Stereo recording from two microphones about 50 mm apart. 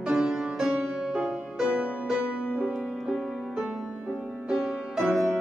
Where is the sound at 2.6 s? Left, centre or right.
Centre.